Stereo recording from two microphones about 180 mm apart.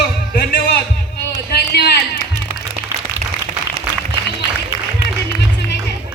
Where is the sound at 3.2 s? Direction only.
40° right (ahead or behind).